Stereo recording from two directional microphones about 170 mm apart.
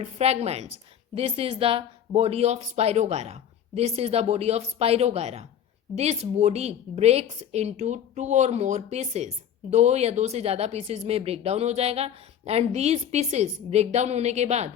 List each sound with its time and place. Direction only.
0.0 s a woman's voice: 40° right (ahead or behind)